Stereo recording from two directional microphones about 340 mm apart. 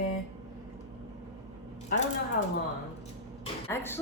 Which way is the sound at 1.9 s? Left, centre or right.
Left.